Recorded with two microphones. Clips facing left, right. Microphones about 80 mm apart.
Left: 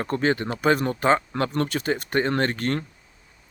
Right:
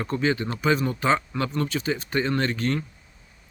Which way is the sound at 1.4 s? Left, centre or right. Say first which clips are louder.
Left 2 dB; left.